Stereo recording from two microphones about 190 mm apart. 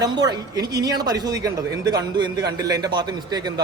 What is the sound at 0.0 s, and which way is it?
A woman's voice, 20° right (ahead or behind).